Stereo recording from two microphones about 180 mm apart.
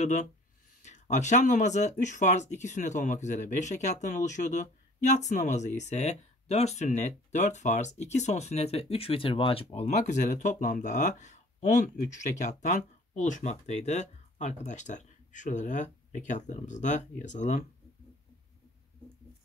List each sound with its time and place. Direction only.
0.0 s speech: 40° left (ahead or behind)